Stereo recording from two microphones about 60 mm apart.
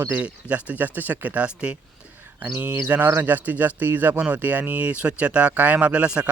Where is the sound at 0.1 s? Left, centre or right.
Right.